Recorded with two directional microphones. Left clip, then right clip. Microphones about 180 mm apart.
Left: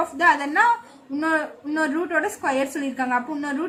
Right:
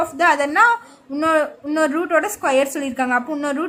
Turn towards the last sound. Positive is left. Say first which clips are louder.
# right 4 dB
turn(degrees=-55)  # may be behind; listen again after turning